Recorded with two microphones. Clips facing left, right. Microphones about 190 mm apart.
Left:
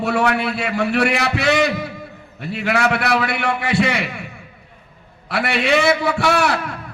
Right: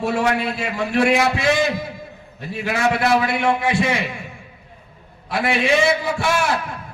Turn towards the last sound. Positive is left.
turn(degrees=65)  # may be behind; listen again after turning